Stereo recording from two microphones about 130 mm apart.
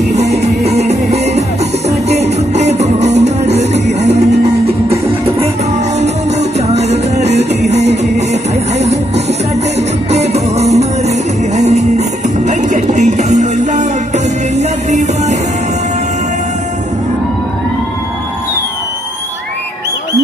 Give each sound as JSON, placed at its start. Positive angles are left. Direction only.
{"t": 0.1, "sound": "music", "side_deg": -60}
{"t": 6.7, "sound": "music", "side_deg": -55}